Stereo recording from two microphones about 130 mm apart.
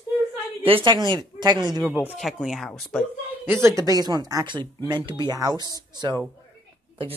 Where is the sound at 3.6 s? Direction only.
25° right (ahead or behind).